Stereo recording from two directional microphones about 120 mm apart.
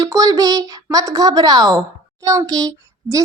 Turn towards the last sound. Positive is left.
turn(degrees=-30)  # may be behind; listen again after turning